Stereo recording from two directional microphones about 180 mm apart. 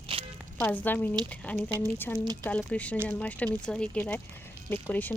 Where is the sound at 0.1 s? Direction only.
30° right (ahead or behind).